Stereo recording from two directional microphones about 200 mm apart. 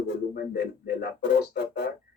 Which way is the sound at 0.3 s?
55° left (ahead or behind).